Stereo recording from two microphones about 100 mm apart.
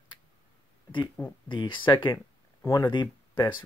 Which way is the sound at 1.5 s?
55° left (ahead or behind).